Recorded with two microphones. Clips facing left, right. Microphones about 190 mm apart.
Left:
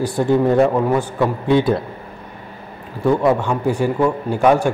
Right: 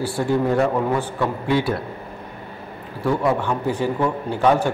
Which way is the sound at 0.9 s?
15° left (ahead or behind).